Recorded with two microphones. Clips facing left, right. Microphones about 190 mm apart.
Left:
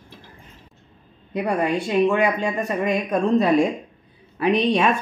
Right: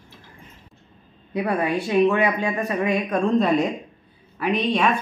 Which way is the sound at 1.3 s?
5° right (ahead or behind).